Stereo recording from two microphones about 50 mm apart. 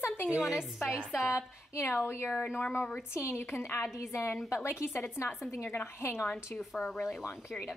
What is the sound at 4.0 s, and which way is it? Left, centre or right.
Speech, left.